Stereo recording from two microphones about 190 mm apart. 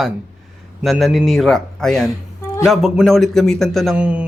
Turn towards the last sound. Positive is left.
turn(degrees=-5)  # may be behind; listen again after turning